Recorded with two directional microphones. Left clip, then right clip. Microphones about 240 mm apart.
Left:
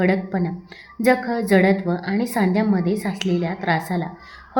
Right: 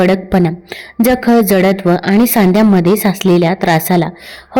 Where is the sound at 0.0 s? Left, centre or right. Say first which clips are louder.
Right 10 dB; right.